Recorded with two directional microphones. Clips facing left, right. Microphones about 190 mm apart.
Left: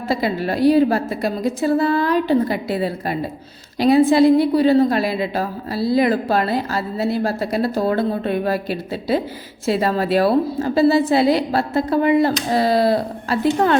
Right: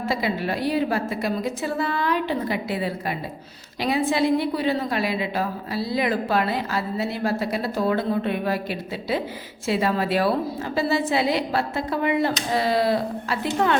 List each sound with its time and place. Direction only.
0.1 s a woman's voice: 35° left (ahead or behind)